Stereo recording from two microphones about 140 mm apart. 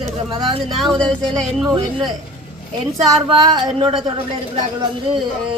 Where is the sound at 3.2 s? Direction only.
35° right (ahead or behind).